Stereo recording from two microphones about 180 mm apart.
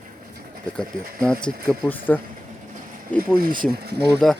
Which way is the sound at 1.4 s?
10° left (ahead or behind).